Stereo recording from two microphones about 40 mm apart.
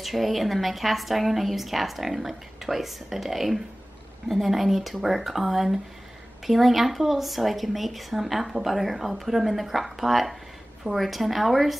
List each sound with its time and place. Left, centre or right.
0.0 s a woman's voice: centre